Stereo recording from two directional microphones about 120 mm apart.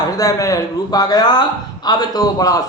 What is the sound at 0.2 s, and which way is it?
A man's voice, 30° left (ahead or behind).